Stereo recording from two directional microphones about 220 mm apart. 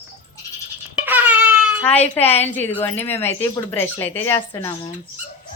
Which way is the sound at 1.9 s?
30° left (ahead or behind).